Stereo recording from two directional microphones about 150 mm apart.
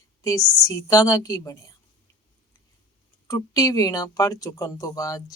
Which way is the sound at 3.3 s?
20° left (ahead or behind).